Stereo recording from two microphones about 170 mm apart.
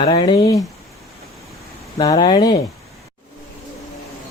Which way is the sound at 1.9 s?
25° left (ahead or behind).